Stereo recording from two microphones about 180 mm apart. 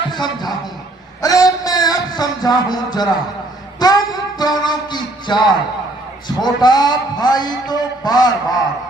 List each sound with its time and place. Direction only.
0.1 s a man's voice: 25° left (ahead or behind)
1.2 s a sound: 20° left (ahead or behind)
6.2 s a man's voice: 25° left (ahead or behind)